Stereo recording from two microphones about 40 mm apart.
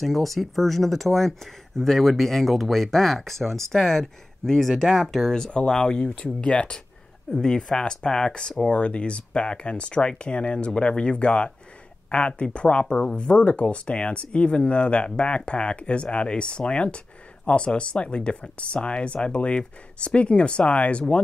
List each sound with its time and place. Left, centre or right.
0.0 s speech: centre
5.7 s speech: centre
5.9 s speech: left
7.2 s speech: centre
7.7 s speech: left
12.8 s speech: centre